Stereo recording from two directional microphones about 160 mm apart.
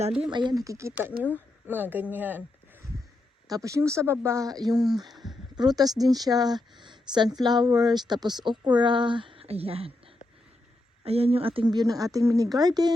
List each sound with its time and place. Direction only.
0.2 s speech: 30° right (ahead or behind); by 2.4 s 10° right (ahead or behind)
3.5 s speech: 20° right (ahead or behind)
5.1 s a sound: centre (ahead or behind)
5.5 s speech: 25° right (ahead or behind)
11.0 s speech: 40° right (ahead or behind)